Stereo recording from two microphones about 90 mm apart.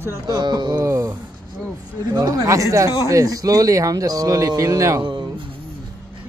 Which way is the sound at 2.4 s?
35° right (ahead or behind).